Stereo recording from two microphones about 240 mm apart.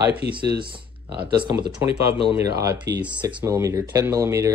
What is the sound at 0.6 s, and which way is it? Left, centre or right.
Speech, centre.